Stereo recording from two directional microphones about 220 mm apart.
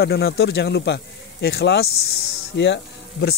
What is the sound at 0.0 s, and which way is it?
Speech, 45° left (ahead or behind).